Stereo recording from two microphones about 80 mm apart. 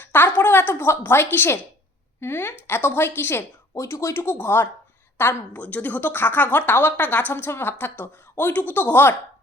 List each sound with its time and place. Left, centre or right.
0.0 s a sound: left
2.2 s a woman's voice: left
3.8 s a woman's voice: left